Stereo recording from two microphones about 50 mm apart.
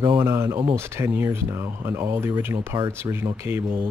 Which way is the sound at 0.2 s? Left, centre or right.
Right.